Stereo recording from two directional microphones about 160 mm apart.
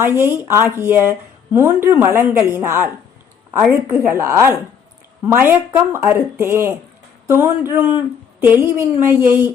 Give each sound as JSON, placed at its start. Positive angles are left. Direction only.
{"t": 0.2, "sound": "speech", "side_deg": -15}